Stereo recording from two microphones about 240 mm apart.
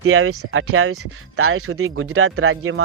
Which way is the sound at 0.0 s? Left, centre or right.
Right.